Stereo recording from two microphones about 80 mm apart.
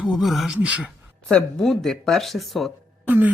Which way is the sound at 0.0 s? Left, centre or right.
Centre.